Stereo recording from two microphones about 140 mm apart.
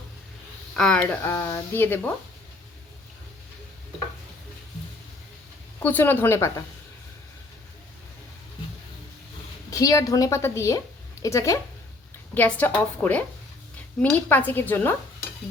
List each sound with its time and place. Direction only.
0.8 s speech: 5° left (ahead or behind)
5.8 s speech: 15° left (ahead or behind)
9.6 s a woman's voice: 25° left (ahead or behind)
12.3 s speech: 10° left (ahead or behind)